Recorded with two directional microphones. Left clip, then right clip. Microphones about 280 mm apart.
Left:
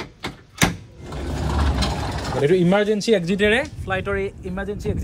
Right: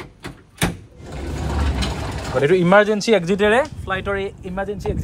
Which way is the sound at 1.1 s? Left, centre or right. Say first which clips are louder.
Left 1 dB; centre.